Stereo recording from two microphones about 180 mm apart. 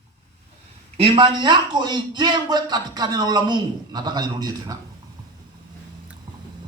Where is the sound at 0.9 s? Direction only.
30° right (ahead or behind).